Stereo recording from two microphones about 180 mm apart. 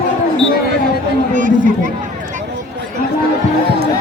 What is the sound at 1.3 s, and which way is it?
Speech, 45° right (ahead or behind).